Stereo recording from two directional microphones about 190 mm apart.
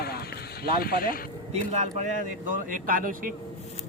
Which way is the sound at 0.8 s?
50° left (ahead or behind).